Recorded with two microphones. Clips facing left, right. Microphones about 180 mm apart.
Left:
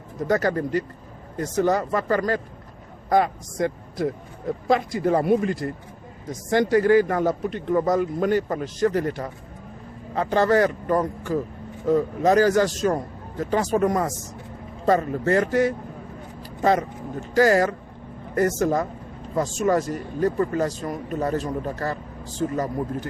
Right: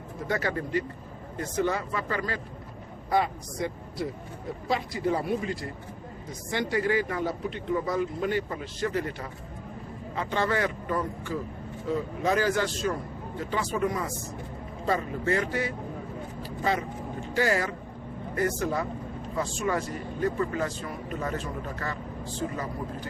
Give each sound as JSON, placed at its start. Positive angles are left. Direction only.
{"t": 0.2, "sound": "a man's voice", "side_deg": 40}